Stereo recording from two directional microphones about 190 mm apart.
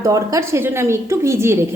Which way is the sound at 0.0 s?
15° right (ahead or behind).